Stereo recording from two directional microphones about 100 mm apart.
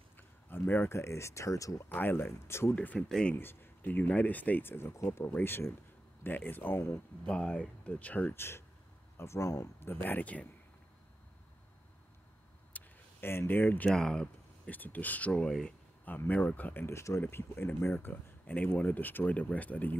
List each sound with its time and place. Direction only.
0.5 s speech: 20° left (ahead or behind)
1.9 s speech: 20° left (ahead or behind)
3.3 s speech: 20° left (ahead or behind)
7.2 s speech: 10° left (ahead or behind)
12.7 s a sound: 25° left (ahead or behind)
13.8 s speech: 5° left (ahead or behind)